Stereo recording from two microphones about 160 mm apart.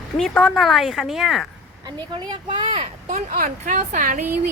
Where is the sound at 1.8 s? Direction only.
30° right (ahead or behind).